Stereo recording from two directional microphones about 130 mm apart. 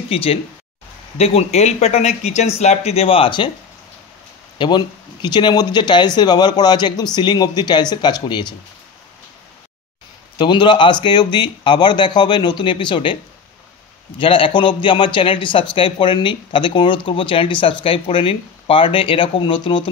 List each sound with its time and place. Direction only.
0.1 s speech: 45° left (ahead or behind)
4.6 s a man's voice: 35° left (ahead or behind)
10.3 s a man's voice: 40° left (ahead or behind)